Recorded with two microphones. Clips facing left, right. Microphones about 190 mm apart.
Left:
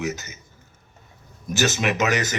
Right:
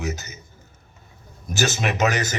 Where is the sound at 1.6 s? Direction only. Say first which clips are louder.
Even; 35° right (ahead or behind).